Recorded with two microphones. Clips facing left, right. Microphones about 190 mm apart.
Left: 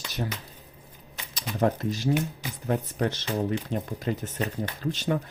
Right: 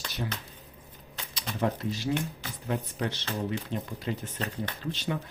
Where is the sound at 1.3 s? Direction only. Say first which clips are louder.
Left 4 dB; 45° left (ahead or behind).